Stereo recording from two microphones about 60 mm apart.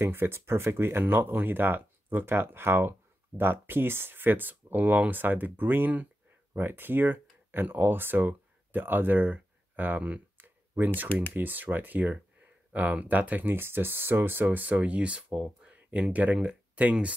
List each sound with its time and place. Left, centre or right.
0.0 s speech: right
10.3 s a sound: right
11.3 s speech: right